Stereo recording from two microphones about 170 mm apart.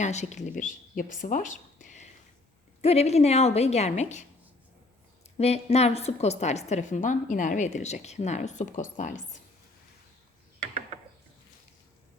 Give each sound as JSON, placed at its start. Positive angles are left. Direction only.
{"t": 0.0, "sound": "a woman's voice", "side_deg": 40}
{"t": 2.8, "sound": "a woman's voice", "side_deg": 35}